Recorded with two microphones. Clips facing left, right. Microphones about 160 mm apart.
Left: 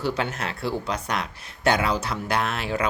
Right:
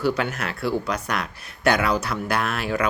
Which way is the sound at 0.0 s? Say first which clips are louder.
Right 3 dB; 25° left (ahead or behind).